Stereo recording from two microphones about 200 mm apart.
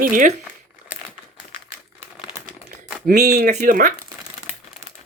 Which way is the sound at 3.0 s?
45° right (ahead or behind).